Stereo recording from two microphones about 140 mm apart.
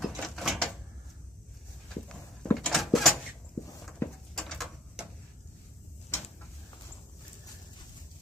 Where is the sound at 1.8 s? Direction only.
5° left (ahead or behind).